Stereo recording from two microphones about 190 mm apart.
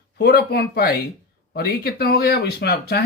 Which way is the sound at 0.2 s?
55° left (ahead or behind).